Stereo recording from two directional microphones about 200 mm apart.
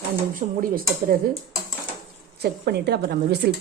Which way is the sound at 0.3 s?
45° right (ahead or behind).